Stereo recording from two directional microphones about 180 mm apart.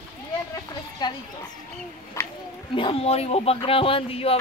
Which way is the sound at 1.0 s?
25° left (ahead or behind).